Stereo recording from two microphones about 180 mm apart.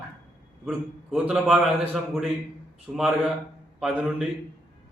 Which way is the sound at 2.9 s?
5° right (ahead or behind).